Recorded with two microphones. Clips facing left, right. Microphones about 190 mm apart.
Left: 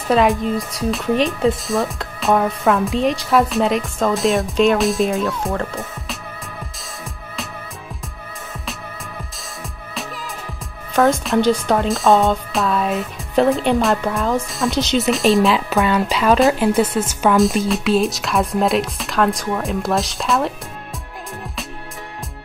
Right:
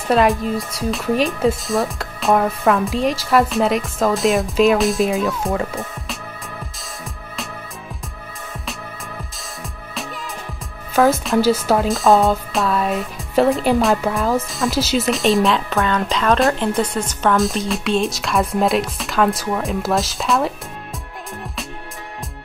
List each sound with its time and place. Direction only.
0.1 s speech: centre (ahead or behind)
10.9 s speech: centre (ahead or behind)